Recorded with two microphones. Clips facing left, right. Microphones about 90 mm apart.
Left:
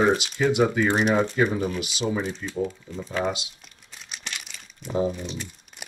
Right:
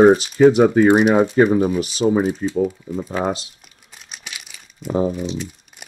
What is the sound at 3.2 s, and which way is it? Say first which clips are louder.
Speech: right 3 dB; 40° right (ahead or behind).